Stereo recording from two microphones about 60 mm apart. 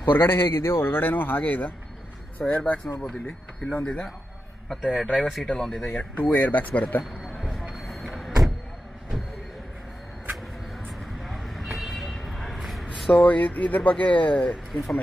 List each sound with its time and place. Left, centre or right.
0.0 s a man's voice: left
3.0 s speech: centre
5.9 s speech: left
7.2 s a sound: centre
7.9 s vehicle: centre
11.2 s vehicle: centre
13.1 s speech: left
14.7 s speech: centre